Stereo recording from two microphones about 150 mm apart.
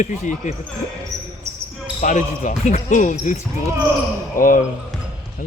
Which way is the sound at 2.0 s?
55° left (ahead or behind).